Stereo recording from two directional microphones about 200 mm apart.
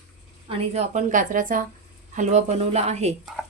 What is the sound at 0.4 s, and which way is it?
Speech, 30° right (ahead or behind).